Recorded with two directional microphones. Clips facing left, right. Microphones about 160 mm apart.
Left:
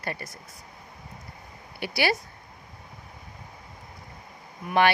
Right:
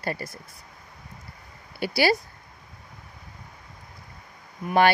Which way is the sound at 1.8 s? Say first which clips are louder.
Right 4 dB; 35° right (ahead or behind).